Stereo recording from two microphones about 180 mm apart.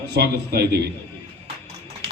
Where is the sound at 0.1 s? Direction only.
60° right (ahead or behind).